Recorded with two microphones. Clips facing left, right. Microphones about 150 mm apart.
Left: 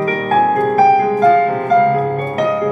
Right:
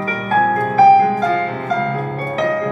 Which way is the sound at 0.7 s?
50° left (ahead or behind).